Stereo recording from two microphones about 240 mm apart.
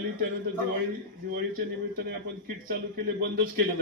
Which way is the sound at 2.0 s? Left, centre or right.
Right.